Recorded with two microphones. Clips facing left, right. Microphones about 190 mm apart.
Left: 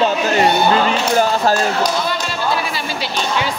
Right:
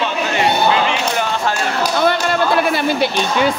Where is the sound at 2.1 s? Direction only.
55° right (ahead or behind).